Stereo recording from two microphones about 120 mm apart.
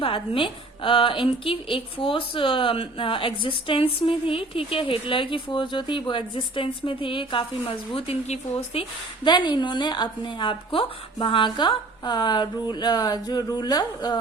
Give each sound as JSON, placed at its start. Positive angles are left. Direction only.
{"t": 0.0, "sound": "a woman's voice", "side_deg": 45}
{"t": 9.2, "sound": "a woman's voice", "side_deg": 40}